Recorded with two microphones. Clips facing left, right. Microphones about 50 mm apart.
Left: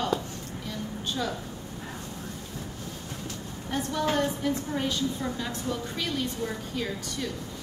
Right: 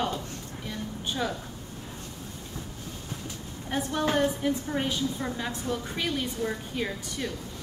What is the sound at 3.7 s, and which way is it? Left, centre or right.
A woman's voice, centre.